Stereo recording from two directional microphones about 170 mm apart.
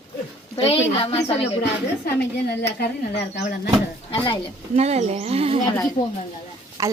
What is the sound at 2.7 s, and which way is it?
Speech, 75° left (ahead or behind).